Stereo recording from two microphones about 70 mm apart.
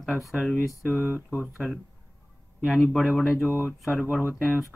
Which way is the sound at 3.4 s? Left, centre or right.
Right.